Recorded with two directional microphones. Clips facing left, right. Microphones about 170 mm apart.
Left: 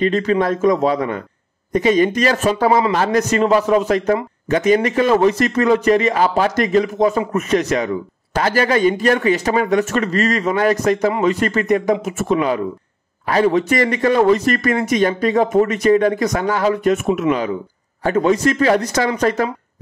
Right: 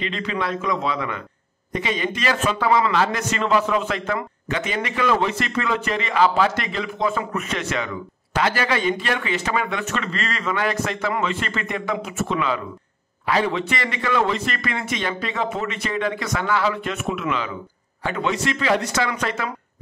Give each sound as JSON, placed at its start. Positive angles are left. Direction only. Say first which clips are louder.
{"t": 0.0, "sound": "a man's voice", "louder": "left 10 dB", "side_deg": 45}